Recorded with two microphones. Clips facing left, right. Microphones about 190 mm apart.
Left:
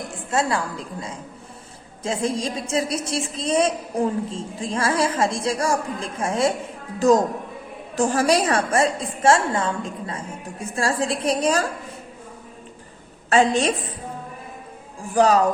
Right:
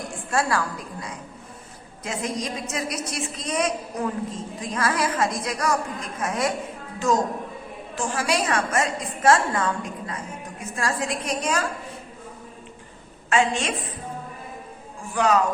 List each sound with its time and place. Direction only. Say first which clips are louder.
0.3 s a woman's voice: left 1 dB; 20° left (ahead or behind)
7.9 s a woman's voice: left 6 dB; 40° left (ahead or behind)
13.3 s a woman's voice: left 5 dB; 35° left (ahead or behind)
15.1 s a woman's voice: left 4 dB; 35° left (ahead or behind)